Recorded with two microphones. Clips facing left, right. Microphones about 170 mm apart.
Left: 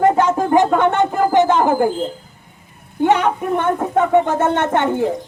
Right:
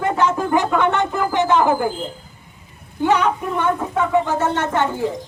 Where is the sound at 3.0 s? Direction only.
55° left (ahead or behind).